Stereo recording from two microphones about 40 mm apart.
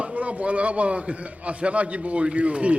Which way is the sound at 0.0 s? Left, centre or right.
Right.